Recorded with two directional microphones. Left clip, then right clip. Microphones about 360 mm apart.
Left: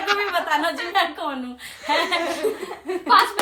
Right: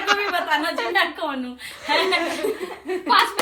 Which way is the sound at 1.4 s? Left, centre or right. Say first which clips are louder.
Right 1 dB; centre.